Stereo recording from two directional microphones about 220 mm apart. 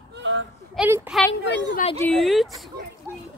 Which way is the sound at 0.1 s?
60° right (ahead or behind).